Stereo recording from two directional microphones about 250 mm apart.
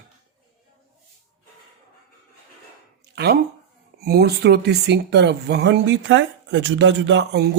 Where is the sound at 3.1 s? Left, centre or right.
Right.